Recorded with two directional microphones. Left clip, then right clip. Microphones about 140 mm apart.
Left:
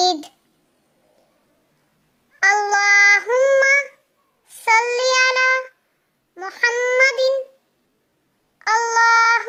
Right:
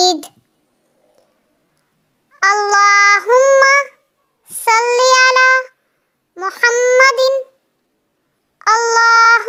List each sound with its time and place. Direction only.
0.0 s a sound: 30° right (ahead or behind)
2.4 s child singing: 30° right (ahead or behind)
8.5 s child singing: 30° right (ahead or behind)